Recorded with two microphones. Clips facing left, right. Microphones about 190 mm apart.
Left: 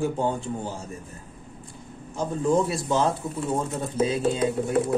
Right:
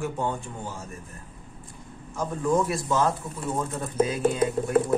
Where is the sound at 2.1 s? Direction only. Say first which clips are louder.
Left 2 dB; 30° left (ahead or behind).